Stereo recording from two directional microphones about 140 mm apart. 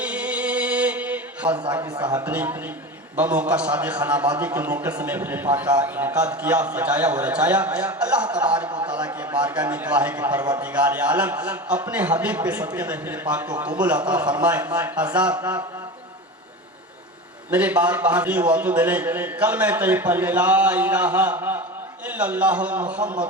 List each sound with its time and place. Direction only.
0.0 s mantra: 10° right (ahead or behind)
1.5 s a man's voice: 35° right (ahead or behind)
2.2 s a man's voice: 10° right (ahead or behind)
17.5 s a man's voice: 10° right (ahead or behind)